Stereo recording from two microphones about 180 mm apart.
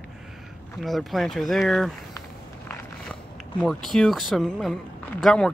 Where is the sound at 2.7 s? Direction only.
5° left (ahead or behind).